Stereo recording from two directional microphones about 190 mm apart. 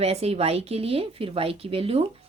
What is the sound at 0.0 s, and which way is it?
A woman's voice, 35° right (ahead or behind).